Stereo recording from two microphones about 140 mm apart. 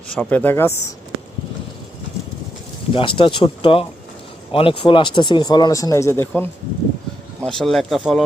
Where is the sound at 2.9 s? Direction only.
40° left (ahead or behind); by 6.3 s 20° left (ahead or behind).